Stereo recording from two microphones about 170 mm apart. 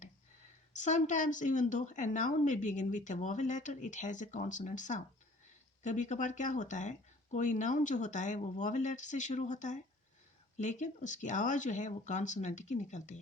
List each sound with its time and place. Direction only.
0.7 s a woman's voice: 45° left (ahead or behind)